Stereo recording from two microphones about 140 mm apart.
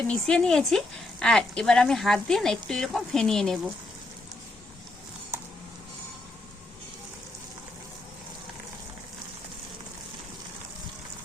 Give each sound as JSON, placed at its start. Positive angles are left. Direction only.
{"t": 0.1, "sound": "speech", "side_deg": 5}